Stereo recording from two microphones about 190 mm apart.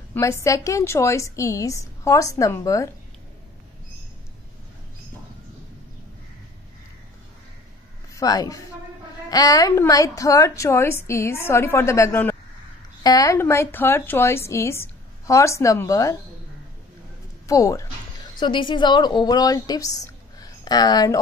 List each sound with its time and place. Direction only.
0.1 s a woman's voice: 15° left (ahead or behind)
8.1 s a woman's voice: 20° left (ahead or behind)
17.5 s music: 15° left (ahead or behind)
18.4 s a woman's voice: 25° left (ahead or behind)